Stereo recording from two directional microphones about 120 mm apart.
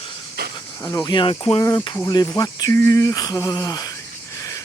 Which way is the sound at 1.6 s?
35° left (ahead or behind).